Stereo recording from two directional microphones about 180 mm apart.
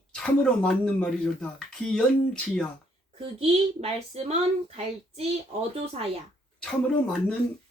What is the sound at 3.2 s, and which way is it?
A child's voice, 35° right (ahead or behind).